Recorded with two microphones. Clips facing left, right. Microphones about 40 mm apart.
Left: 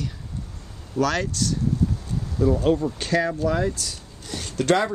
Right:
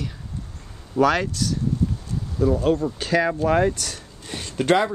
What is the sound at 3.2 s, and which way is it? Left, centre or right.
Speech, right.